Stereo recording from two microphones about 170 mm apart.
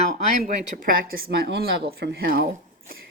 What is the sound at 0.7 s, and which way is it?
Speech, 55° right (ahead or behind).